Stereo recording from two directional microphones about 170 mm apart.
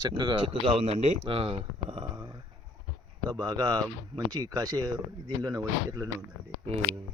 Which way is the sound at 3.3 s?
25° right (ahead or behind).